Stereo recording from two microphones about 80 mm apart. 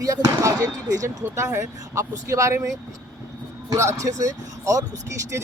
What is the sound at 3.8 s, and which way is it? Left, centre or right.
Speech, right.